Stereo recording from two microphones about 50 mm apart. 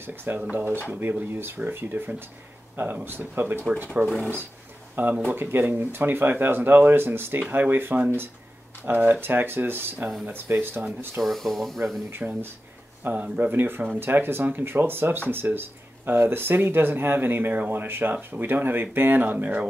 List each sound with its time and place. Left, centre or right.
0.0 s speech: right
0.4 s speech: right
11.1 s speech: centre
12.2 s speech: right
13.0 s speech: right
13.5 s speech: right